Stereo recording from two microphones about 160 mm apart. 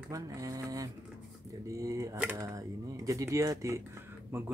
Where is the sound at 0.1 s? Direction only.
20° right (ahead or behind).